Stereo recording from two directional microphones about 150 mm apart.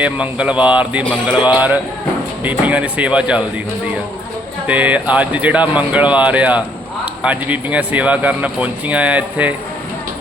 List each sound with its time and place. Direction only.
0.0 s speech: 10° right (ahead or behind)
1.4 s a man's voice: 30° left (ahead or behind)
2.4 s speech: 10° right (ahead or behind)
4.6 s speech: 10° right (ahead or behind)